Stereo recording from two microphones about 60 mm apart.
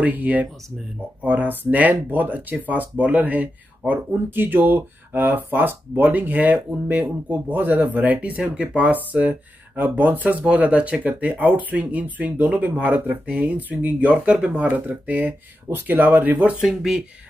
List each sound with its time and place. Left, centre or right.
0.0 s speech: right
16.6 s speech: centre